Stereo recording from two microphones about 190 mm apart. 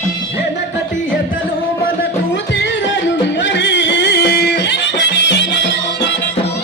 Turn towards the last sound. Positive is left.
turn(degrees=70)  # may be behind; listen again after turning